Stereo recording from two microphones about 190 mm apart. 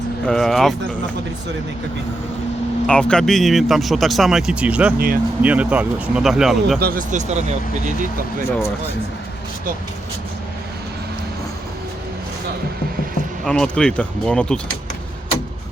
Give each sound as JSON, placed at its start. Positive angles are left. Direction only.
{"t": 0.3, "sound": "speech", "side_deg": 0}
{"t": 2.8, "sound": "speech", "side_deg": 5}
{"t": 4.9, "sound": "speech", "side_deg": -50}
{"t": 5.4, "sound": "speech", "side_deg": -5}
{"t": 6.7, "sound": "speech", "side_deg": -50}
{"t": 13.4, "sound": "speech", "side_deg": 5}